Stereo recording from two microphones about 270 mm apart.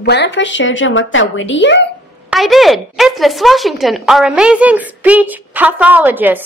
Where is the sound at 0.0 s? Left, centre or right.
Left.